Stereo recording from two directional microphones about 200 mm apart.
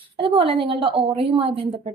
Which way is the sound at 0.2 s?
25° right (ahead or behind).